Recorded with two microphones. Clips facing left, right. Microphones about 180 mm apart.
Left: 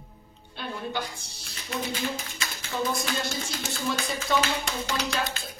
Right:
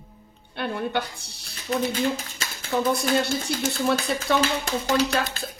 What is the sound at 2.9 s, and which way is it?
A woman's voice, 65° right (ahead or behind).